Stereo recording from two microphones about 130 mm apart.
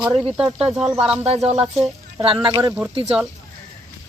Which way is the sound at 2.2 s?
40° right (ahead or behind).